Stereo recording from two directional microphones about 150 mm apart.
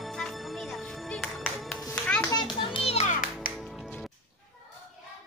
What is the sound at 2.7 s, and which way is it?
Music, 45° left (ahead or behind).